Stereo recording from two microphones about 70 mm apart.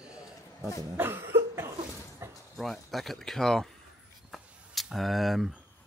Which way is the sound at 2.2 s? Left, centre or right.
Right.